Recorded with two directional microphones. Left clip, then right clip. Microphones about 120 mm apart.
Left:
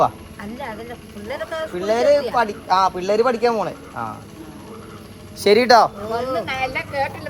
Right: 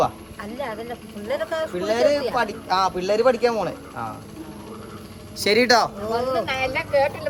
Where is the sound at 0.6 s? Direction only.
35° right (ahead or behind).